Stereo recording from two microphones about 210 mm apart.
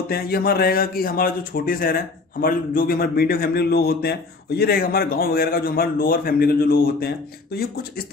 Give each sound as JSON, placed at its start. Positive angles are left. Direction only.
{"t": 0.1, "sound": "speech", "side_deg": 45}